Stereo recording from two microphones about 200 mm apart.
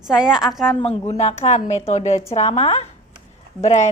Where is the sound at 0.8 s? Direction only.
30° left (ahead or behind).